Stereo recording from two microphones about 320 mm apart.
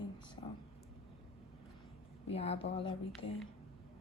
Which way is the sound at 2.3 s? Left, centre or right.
Centre.